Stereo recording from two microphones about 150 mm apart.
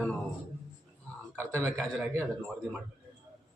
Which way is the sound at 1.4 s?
20° right (ahead or behind).